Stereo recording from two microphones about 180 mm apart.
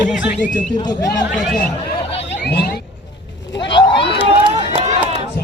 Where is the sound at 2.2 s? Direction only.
70° left (ahead or behind).